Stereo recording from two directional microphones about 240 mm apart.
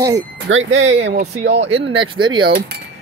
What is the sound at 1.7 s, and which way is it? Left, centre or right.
Speech, right.